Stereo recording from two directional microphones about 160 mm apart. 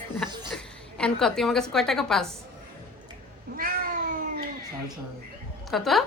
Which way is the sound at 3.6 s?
65° right (ahead or behind).